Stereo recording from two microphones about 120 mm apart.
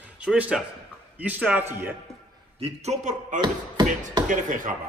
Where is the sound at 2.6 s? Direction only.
65° right (ahead or behind).